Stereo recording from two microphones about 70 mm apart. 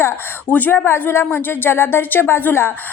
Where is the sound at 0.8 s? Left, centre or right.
Left.